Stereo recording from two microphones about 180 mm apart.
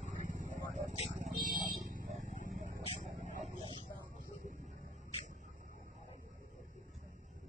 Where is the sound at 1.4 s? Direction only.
45° right (ahead or behind).